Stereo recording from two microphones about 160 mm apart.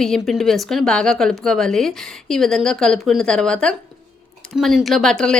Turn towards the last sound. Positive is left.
turn(degrees=5)  # may be behind; listen again after turning